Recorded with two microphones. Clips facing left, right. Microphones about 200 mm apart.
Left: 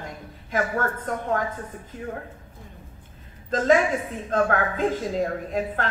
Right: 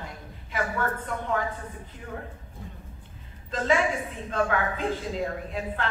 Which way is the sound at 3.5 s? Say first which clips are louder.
Left 5 dB; 45° left (ahead or behind).